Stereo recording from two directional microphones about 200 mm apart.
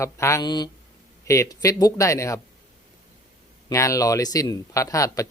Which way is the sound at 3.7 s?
15° left (ahead or behind).